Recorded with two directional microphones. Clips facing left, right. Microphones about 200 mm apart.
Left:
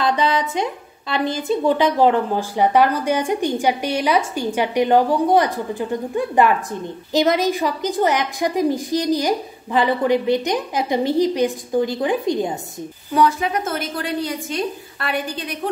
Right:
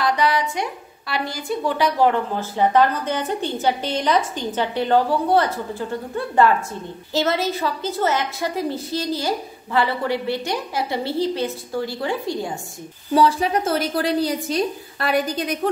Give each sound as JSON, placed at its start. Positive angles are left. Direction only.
{"t": 0.0, "sound": "a woman's voice", "side_deg": 20}
{"t": 13.1, "sound": "a woman's voice", "side_deg": -30}